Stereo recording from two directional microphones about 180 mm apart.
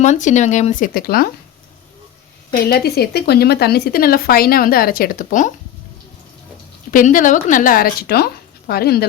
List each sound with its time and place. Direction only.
0.0 s speech: 40° left (ahead or behind)
2.5 s speech: 60° left (ahead or behind)
6.9 s speech: 50° left (ahead or behind)